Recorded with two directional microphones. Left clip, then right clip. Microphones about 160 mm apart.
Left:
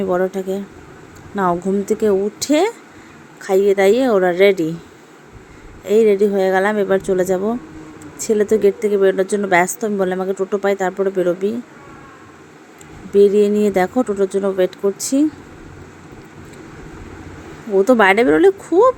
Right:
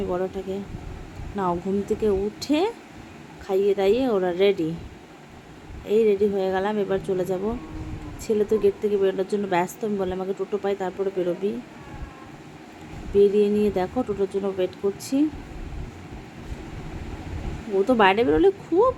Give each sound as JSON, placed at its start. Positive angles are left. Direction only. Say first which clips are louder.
{"t": 0.1, "sound": "speech", "louder": "left 9 dB", "side_deg": 35}
{"t": 5.9, "sound": "speech", "louder": "left 7 dB", "side_deg": 30}
{"t": 13.1, "sound": "speech", "louder": "left 6 dB", "side_deg": 30}
{"t": 17.7, "sound": "speech", "louder": "left 7 dB", "side_deg": 35}